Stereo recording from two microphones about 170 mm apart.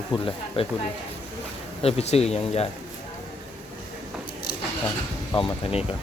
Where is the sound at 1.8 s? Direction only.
35° left (ahead or behind).